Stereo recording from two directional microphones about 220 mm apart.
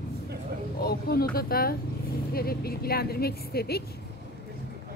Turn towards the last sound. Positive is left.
turn(degrees=45)  # may be behind; listen again after turning